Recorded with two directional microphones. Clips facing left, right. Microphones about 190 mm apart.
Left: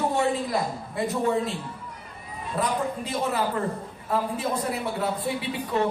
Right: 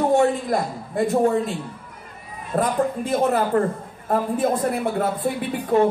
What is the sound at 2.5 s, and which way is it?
A woman's voice, 50° right (ahead or behind).